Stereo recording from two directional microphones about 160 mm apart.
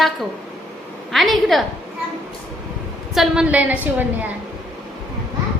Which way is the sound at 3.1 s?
5° right (ahead or behind).